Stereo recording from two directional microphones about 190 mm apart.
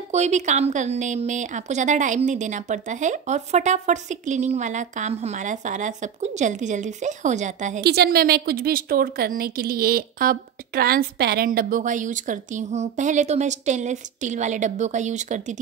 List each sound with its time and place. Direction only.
0.1 s a woman's voice: 35° right (ahead or behind)
7.8 s a woman's voice: 60° right (ahead or behind); by 15.6 s 40° right (ahead or behind)